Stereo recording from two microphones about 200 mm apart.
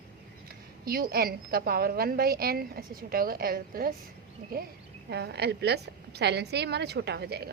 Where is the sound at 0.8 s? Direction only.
50° right (ahead or behind).